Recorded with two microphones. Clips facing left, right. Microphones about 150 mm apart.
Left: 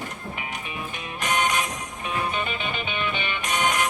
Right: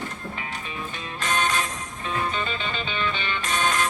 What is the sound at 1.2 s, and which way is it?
Music, 15° left (ahead or behind).